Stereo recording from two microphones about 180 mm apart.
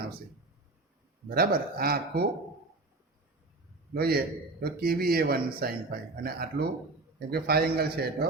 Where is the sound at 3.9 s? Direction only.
60° right (ahead or behind).